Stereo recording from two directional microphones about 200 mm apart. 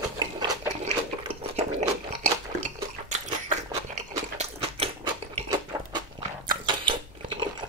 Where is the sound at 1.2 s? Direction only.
35° right (ahead or behind).